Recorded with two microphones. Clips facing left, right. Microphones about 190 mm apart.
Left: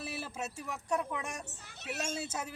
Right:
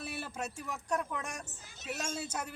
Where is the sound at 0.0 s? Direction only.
5° left (ahead or behind).